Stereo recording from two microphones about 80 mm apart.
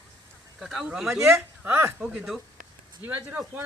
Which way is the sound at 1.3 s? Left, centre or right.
Right.